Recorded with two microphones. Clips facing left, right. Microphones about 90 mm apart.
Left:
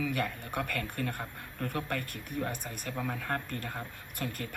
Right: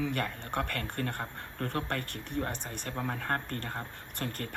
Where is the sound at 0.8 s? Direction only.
35° right (ahead or behind).